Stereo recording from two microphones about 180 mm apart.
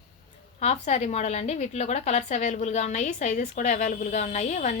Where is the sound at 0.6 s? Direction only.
40° left (ahead or behind).